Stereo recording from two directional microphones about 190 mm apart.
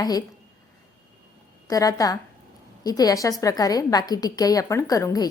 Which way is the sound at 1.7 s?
20° left (ahead or behind).